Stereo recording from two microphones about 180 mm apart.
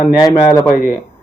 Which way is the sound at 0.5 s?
15° left (ahead or behind).